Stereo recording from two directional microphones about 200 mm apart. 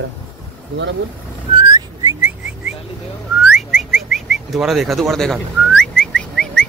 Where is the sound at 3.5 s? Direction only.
Centre (ahead or behind).